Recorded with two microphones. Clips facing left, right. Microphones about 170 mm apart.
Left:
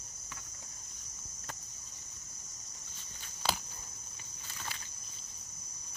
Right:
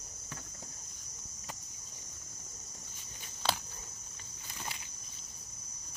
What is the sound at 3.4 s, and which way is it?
Cricket, 10° left (ahead or behind).